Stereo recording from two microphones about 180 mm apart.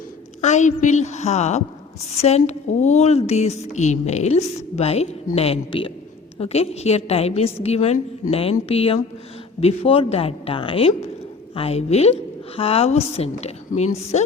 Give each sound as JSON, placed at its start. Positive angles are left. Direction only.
{"t": 0.4, "sound": "a woman's voice", "side_deg": 40}